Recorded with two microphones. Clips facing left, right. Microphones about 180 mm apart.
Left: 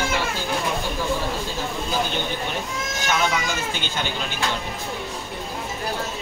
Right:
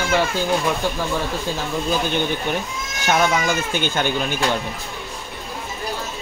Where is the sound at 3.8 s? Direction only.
50° right (ahead or behind).